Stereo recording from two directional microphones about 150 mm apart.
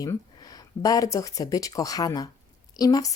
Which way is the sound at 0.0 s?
25° left (ahead or behind).